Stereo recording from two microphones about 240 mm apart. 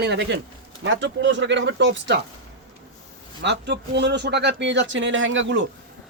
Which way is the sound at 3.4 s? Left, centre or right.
Right.